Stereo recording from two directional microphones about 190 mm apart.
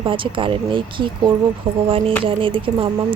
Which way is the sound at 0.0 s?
25° right (ahead or behind).